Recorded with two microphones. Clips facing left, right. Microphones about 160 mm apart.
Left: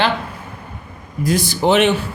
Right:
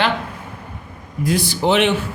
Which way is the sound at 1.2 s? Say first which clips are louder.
Left 2 dB; 45° left (ahead or behind).